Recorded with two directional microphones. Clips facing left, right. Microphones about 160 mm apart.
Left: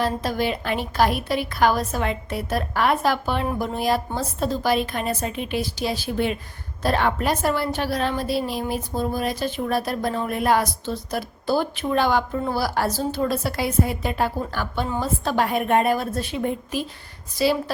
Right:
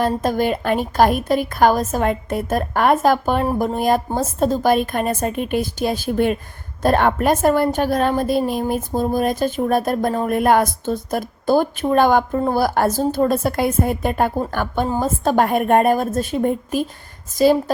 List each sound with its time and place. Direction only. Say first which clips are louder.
0.0 s a woman's voice: right 5 dB; 45° right (ahead or behind)